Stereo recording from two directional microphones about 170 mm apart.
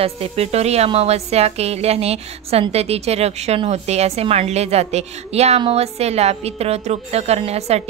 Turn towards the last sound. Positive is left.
turn(degrees=-40)  # may be behind; listen again after turning